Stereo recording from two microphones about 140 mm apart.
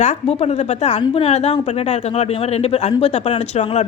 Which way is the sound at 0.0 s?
60° left (ahead or behind).